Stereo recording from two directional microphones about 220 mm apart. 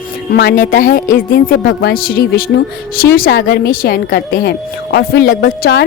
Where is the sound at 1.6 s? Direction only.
50° left (ahead or behind).